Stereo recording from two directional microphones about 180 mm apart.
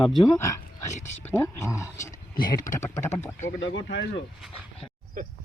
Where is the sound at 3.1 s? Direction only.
40° left (ahead or behind).